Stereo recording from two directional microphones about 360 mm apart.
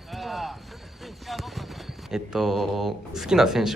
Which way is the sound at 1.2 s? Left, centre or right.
Centre.